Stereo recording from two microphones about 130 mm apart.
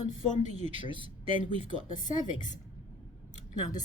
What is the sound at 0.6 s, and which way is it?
Speech, 45° right (ahead or behind).